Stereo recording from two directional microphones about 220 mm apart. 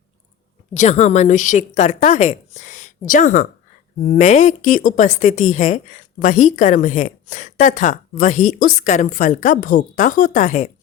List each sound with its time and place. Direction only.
0.7 s speech: 30° left (ahead or behind)